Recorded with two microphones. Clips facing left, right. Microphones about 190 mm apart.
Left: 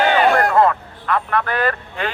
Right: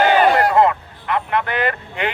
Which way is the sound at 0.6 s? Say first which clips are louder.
Even; 20° right (ahead or behind).